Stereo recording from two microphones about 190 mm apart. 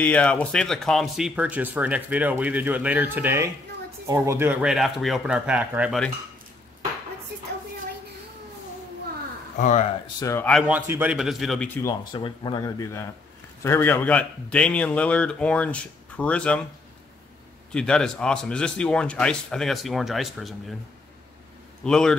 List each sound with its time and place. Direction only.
0.0 s speech: 5° left (ahead or behind)
9.6 s speech: 40° left (ahead or behind)
10.2 s a man's voice: 15° left (ahead or behind)
10.7 s speech: 10° right (ahead or behind); by 11.9 s 10° left (ahead or behind)
12.0 s a man's voice: 25° left (ahead or behind); by 16.6 s 5° left (ahead or behind)
17.7 s speech: 5° left (ahead or behind)
21.8 s speech: 5° left (ahead or behind)